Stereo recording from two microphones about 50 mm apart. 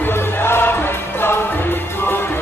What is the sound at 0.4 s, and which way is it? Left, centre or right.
Music, left.